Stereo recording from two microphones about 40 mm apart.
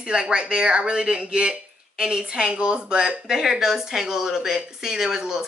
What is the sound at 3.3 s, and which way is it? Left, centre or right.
Speech, centre.